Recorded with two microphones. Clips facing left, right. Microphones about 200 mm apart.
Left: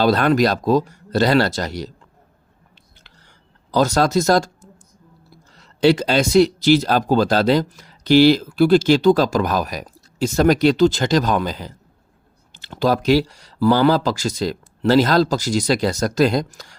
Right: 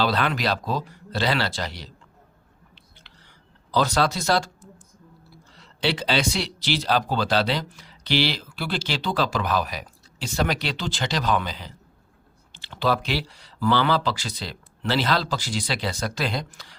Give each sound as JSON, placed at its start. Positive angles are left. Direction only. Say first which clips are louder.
{"t": 0.0, "sound": "speech", "louder": "left 8 dB", "side_deg": 45}
{"t": 3.7, "sound": "speech", "louder": "left 5 dB", "side_deg": 45}